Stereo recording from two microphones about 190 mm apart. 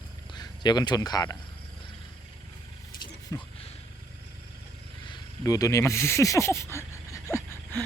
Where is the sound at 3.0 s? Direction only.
25° left (ahead or behind).